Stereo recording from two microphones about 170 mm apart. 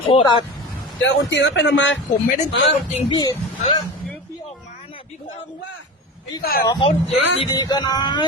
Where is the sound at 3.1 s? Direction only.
25° left (ahead or behind).